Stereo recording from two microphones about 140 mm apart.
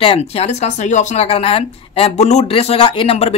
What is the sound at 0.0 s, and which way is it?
Speech, 45° left (ahead or behind).